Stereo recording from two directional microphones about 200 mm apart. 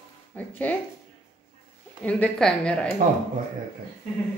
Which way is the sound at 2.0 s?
5° left (ahead or behind).